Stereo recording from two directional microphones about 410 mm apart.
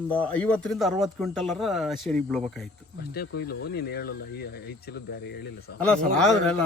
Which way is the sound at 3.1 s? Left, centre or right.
Left.